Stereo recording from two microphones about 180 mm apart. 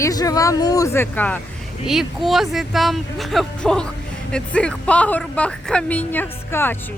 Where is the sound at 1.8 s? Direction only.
Centre (ahead or behind).